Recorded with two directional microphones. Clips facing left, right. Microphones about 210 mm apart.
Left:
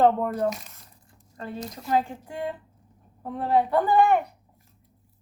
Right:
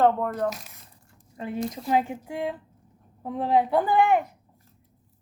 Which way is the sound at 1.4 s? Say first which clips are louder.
Right 5 dB; 15° right (ahead or behind).